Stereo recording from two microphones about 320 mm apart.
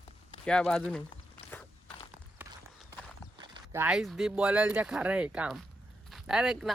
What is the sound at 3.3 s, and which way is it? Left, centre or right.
Speech, centre.